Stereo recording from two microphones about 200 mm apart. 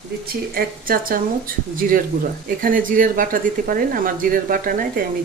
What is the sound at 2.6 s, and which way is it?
Speech, 45° right (ahead or behind).